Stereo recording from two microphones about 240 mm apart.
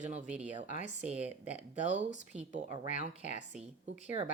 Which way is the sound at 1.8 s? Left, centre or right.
Right.